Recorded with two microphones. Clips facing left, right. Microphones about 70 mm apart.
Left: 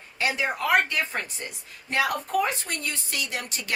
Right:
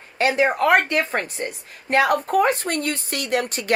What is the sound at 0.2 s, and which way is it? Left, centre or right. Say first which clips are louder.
Speech: right 8 dB; right.